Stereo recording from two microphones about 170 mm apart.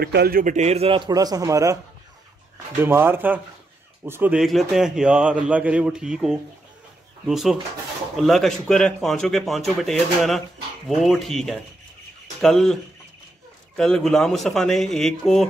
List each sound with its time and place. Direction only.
0.0 s a man's voice: 70° right (ahead or behind); by 1.8 s 20° right (ahead or behind)
2.8 s a man's voice: 15° right (ahead or behind)
13.7 s a man's voice: 5° left (ahead or behind)